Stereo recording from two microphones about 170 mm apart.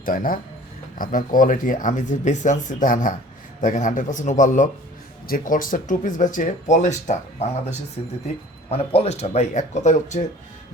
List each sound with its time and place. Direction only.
0.0 s speech: 55° left (ahead or behind)